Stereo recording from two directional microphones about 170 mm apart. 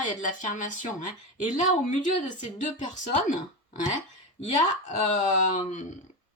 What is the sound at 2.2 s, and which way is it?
Speech, 45° left (ahead or behind).